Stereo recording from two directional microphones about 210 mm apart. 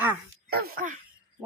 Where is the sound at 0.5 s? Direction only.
45° right (ahead or behind).